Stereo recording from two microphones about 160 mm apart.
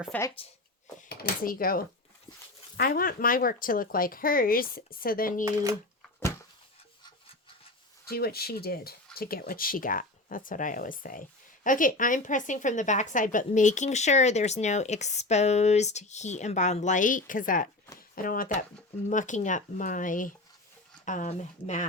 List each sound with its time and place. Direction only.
0.1 s speech: 10° left (ahead or behind)
1.0 s speech: 90° left; by 5.5 s 65° left (ahead or behind)
8.0 s speech: 75° left (ahead or behind); by 21.8 s 50° left (ahead or behind)